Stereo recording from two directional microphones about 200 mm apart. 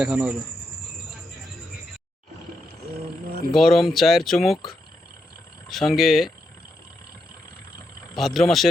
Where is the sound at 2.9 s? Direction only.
50° right (ahead or behind).